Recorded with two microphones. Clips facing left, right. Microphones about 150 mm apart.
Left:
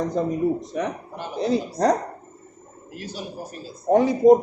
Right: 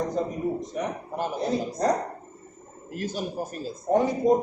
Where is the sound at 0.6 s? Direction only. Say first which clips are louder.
Left 3 dB; 90° left.